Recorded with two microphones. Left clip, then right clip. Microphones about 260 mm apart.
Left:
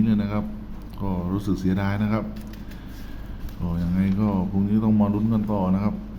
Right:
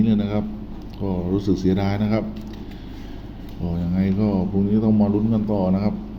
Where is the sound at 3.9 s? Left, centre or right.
Centre.